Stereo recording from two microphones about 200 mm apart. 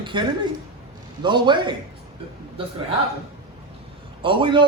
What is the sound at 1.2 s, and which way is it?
Speech, 25° right (ahead or behind).